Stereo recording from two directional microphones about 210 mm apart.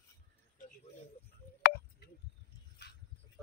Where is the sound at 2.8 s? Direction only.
50° left (ahead or behind).